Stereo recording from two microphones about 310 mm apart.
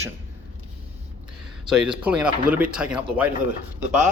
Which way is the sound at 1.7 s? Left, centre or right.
Centre.